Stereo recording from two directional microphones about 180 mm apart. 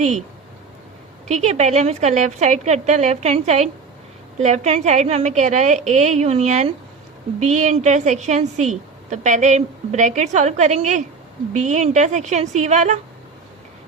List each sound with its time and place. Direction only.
0.0 s a woman's voice: 40° right (ahead or behind)
1.3 s a woman's voice: 40° right (ahead or behind)